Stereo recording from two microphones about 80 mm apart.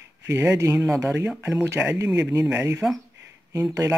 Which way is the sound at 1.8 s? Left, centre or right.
Centre.